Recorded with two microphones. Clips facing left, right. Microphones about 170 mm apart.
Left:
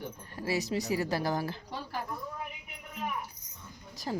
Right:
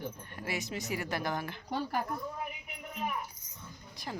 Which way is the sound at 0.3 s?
35° left (ahead or behind).